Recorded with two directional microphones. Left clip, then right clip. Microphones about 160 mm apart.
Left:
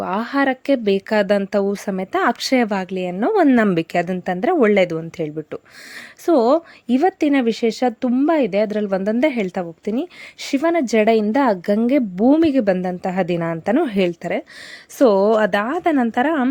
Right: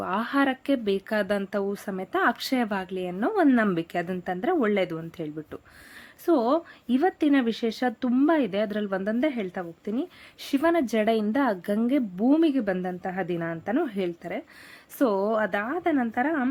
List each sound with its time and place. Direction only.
0.0 s a woman's voice: 35° left (ahead or behind); by 16.5 s 60° left (ahead or behind)